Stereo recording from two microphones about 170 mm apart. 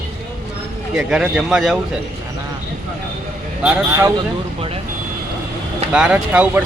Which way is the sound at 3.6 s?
5° right (ahead or behind).